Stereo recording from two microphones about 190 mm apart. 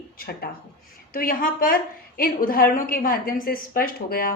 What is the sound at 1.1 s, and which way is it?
A woman's voice, 50° left (ahead or behind).